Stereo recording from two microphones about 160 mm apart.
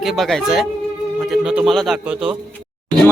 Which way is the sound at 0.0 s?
Centre (ahead or behind).